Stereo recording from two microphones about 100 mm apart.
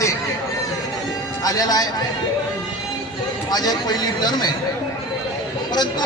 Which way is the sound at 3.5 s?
40° left (ahead or behind).